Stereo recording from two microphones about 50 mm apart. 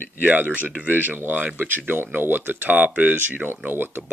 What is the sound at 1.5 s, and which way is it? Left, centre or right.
Speech, right.